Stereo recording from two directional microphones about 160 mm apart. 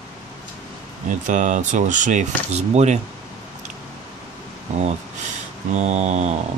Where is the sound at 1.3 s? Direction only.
50° right (ahead or behind).